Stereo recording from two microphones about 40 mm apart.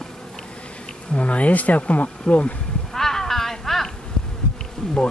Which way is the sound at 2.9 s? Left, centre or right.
Centre.